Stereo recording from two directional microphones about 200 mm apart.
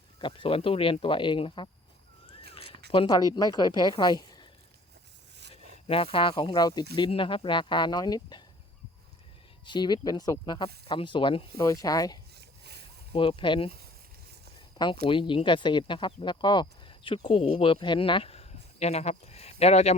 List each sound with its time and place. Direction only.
0.2 s speech: 25° left (ahead or behind)
2.9 s speech: 20° left (ahead or behind)
5.5 s speech: 30° left (ahead or behind)
9.6 s speech: 20° left (ahead or behind)
15.0 s speech: 25° left (ahead or behind)